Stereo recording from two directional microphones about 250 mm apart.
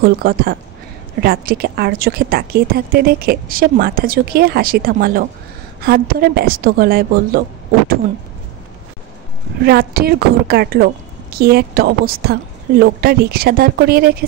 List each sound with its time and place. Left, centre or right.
0.0 s a woman's voice: right
9.7 s a woman's voice: right